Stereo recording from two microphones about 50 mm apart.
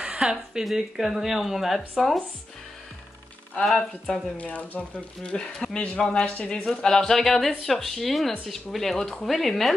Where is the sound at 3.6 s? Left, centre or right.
Centre.